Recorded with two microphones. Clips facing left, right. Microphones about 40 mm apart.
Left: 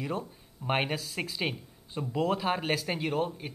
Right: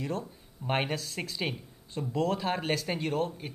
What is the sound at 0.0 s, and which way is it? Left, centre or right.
Speech, centre.